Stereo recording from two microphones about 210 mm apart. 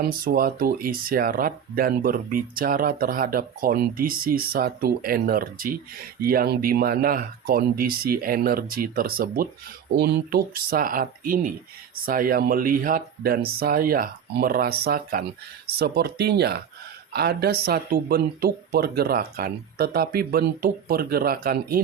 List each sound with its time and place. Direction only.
0.0 s speech: 45° right (ahead or behind)